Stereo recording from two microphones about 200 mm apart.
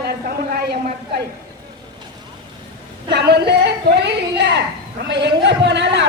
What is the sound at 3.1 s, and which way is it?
A woman's voice, 55° right (ahead or behind).